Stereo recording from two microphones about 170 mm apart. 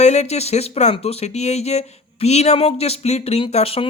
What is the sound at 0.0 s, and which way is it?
Speech, 40° left (ahead or behind).